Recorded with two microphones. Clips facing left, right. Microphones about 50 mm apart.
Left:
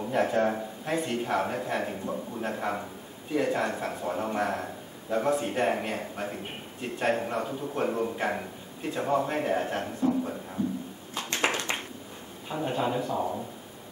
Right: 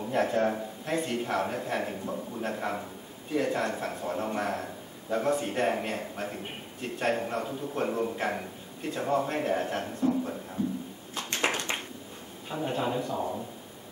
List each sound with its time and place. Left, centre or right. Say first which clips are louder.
0.0 s a man's voice: left 1 dB; centre
12.4 s speech: left 1 dB; centre